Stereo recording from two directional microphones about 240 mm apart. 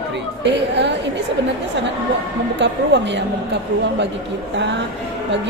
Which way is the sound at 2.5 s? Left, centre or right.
Right.